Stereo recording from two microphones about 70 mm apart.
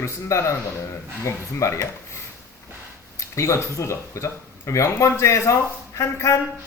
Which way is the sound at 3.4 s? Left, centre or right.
Left.